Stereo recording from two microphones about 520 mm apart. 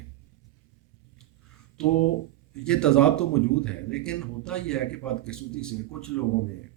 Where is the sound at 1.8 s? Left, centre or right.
Centre.